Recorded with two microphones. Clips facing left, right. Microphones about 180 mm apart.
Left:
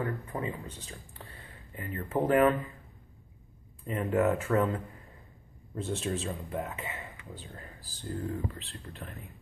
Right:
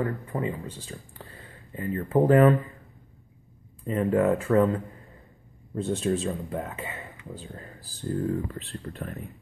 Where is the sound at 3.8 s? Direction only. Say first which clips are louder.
Right 4 dB; 35° right (ahead or behind).